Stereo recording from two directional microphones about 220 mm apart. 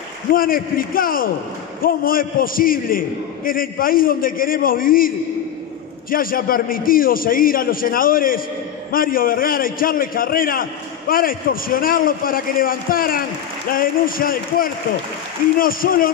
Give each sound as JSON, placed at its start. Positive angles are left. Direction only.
{"t": 0.3, "sound": "a man's voice", "side_deg": 40}